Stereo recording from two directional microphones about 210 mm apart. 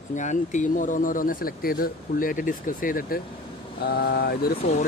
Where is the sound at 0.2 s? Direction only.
35° left (ahead or behind).